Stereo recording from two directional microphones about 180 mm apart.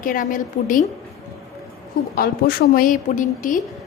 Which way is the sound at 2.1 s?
55° left (ahead or behind).